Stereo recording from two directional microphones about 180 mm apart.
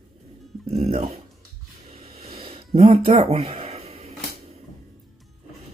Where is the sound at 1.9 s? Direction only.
35° right (ahead or behind).